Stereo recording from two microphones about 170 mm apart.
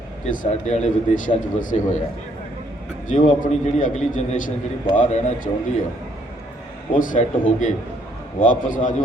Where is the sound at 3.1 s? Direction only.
50° left (ahead or behind).